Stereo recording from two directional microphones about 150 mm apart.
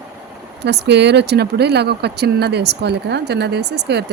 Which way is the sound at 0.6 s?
90° right.